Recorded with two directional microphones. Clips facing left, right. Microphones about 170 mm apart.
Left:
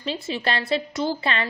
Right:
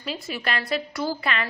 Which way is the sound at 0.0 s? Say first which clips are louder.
Left 4 dB; 25° left (ahead or behind).